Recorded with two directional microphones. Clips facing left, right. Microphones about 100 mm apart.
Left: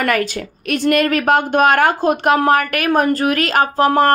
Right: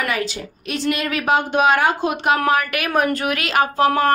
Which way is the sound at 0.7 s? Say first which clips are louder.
Left 7 dB; 55° left (ahead or behind).